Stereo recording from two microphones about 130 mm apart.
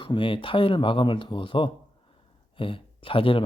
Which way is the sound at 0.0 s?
40° left (ahead or behind).